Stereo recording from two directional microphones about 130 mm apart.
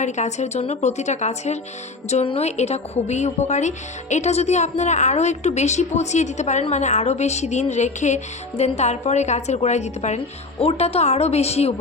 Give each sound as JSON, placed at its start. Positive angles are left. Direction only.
{"t": 0.0, "sound": "a woman's voice", "side_deg": 65}